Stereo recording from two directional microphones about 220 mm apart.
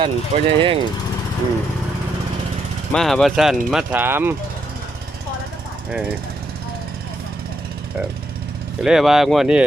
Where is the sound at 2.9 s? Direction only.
5° left (ahead or behind).